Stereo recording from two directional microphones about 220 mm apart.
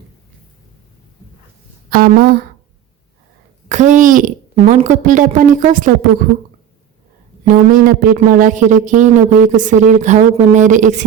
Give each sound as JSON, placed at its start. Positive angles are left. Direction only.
{"t": 1.9, "sound": "speech", "side_deg": -45}
{"t": 3.7, "sound": "a man's voice", "side_deg": -35}
{"t": 7.4, "sound": "a man's voice", "side_deg": -40}